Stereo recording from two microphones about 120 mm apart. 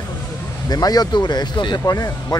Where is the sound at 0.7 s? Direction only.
35° left (ahead or behind).